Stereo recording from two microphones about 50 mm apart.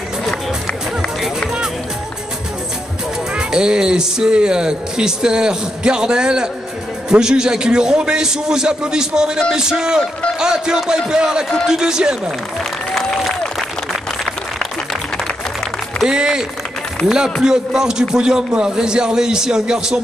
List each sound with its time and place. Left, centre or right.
3.3 s speech: centre
16.1 s speech: centre